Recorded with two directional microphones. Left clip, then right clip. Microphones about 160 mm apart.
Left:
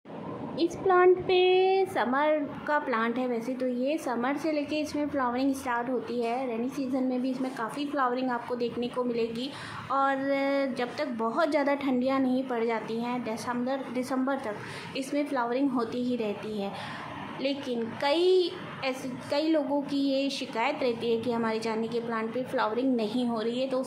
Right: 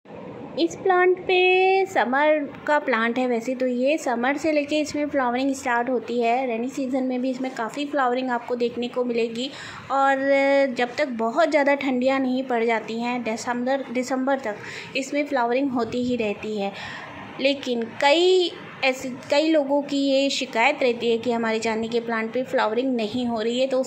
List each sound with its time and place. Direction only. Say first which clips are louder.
0.6 s a woman's voice: right 4 dB; 10° right (ahead or behind)